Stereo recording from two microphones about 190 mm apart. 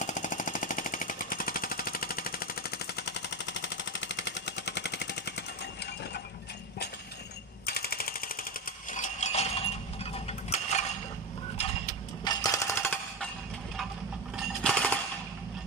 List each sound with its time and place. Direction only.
0.0 s jackhammer: 40° left (ahead or behind)
3.0 s jackhammer: 65° left (ahead or behind)
7.6 s machine gun: 55° left (ahead or behind)
8.9 s a sound: 40° left (ahead or behind)
12.3 s music: 20° left (ahead or behind)
14.3 s a sound: centre (ahead or behind)